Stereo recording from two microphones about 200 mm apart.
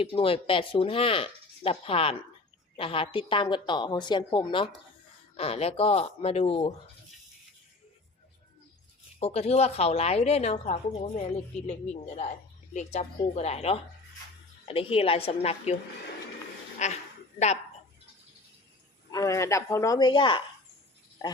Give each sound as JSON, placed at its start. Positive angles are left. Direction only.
{"t": 0.0, "sound": "speech", "side_deg": 25}
{"t": 9.2, "sound": "a woman's voice", "side_deg": 30}
{"t": 19.1, "sound": "speech", "side_deg": 15}